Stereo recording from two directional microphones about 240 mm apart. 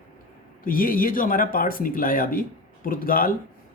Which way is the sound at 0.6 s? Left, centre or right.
Left.